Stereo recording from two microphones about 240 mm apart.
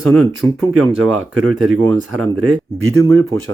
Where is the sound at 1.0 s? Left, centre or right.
Right.